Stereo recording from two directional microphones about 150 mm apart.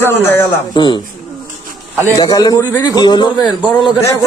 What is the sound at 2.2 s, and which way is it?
A man's voice, 25° left (ahead or behind).